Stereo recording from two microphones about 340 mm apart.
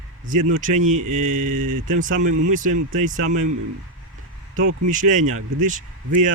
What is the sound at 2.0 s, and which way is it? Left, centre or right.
A man's voice, right.